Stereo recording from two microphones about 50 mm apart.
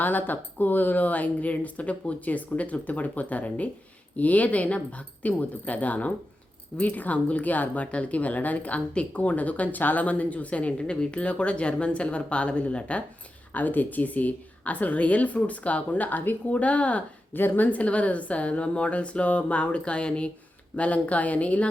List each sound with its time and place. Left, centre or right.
0.0 s speech: left
17.3 s speech: left